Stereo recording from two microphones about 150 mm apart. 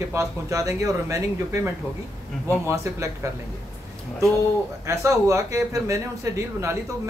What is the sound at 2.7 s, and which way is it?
Speech, 20° right (ahead or behind).